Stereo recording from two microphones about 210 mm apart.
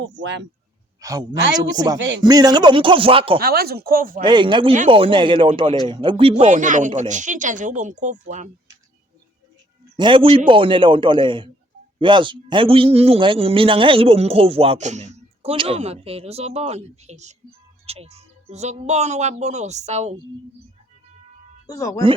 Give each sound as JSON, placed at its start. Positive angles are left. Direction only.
{"t": 0.0, "sound": "speech", "side_deg": -60}
{"t": 1.0, "sound": "a man's voice", "side_deg": -15}
{"t": 2.0, "sound": "speech", "side_deg": -60}
{"t": 2.2, "sound": "a man's voice", "side_deg": -20}
{"t": 3.3, "sound": "speech", "side_deg": -45}
{"t": 4.2, "sound": "a man's voice", "side_deg": -20}
{"t": 10.0, "sound": "a man's voice", "side_deg": -25}
{"t": 21.8, "sound": "speech", "side_deg": 15}